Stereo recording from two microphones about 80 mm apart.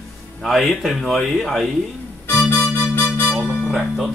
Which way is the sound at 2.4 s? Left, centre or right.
Left.